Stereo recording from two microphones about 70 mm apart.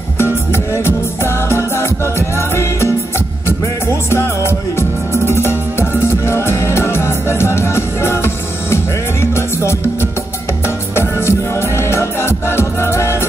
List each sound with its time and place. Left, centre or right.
0.2 s music: left
11.0 s music: left